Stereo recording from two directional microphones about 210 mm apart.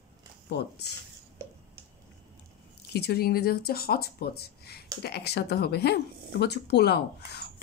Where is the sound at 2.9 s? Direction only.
50° left (ahead or behind).